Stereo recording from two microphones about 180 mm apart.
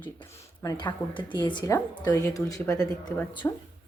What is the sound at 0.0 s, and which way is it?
A woman's voice, 15° left (ahead or behind).